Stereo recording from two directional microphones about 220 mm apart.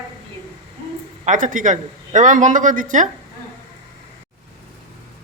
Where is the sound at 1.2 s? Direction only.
35° right (ahead or behind).